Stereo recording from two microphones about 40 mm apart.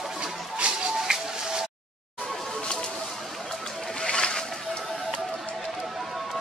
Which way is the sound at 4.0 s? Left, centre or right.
Left.